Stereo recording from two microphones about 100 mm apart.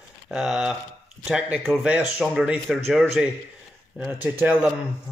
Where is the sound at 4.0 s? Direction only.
15° right (ahead or behind).